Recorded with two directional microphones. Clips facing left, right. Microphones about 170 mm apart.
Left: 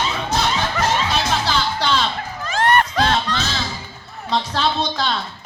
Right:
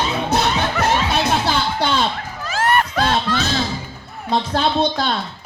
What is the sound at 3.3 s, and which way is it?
Music, 10° right (ahead or behind).